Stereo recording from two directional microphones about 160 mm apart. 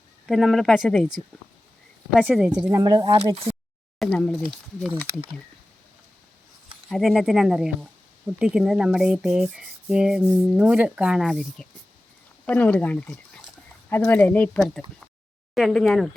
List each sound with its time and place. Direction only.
0.3 s a woman's voice: centre (ahead or behind)
2.7 s speech: 25° right (ahead or behind)
4.0 s speech: 5° left (ahead or behind)
6.8 s speech: centre (ahead or behind)